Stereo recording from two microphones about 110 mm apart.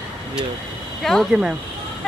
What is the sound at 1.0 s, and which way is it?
Speech, centre (ahead or behind).